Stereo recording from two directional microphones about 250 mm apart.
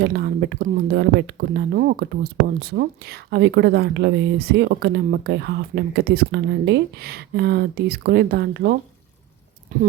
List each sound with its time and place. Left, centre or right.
0.0 s speech: right